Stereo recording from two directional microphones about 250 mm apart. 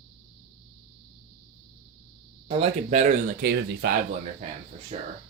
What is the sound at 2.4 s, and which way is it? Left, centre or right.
Speech, right.